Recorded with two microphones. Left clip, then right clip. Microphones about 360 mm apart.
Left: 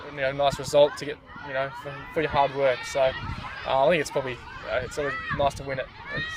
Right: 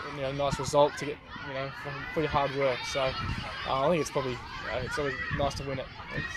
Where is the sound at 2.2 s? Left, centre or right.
Left.